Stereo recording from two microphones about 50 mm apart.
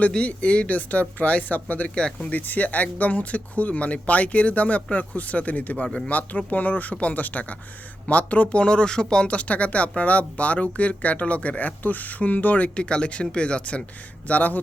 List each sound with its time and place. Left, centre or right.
0.2 s speech: left
5.7 s a man's voice: centre
6.1 s speech: left
8.6 s speech: centre; by 12.7 s left
12.7 s speech: left